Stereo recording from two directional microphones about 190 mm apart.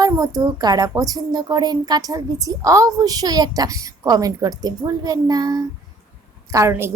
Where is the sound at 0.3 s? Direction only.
20° right (ahead or behind).